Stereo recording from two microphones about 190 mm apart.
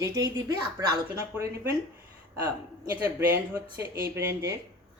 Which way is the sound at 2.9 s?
10° right (ahead or behind).